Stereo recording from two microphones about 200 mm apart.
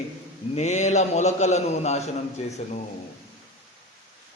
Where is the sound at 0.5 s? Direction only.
35° left (ahead or behind).